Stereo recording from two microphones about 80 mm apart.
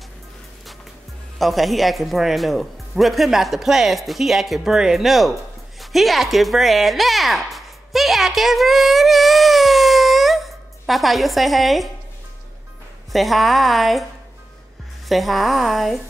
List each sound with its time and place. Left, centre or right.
1.4 s speech: centre
13.1 s speech: centre
15.0 s speech: centre